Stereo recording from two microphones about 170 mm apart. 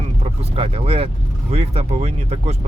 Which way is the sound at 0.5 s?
35° right (ahead or behind).